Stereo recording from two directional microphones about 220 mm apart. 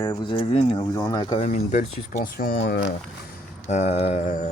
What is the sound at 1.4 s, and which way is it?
Speech, 35° left (ahead or behind).